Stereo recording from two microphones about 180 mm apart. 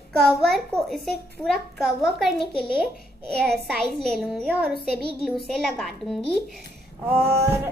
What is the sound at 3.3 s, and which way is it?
Speech, 60° right (ahead or behind).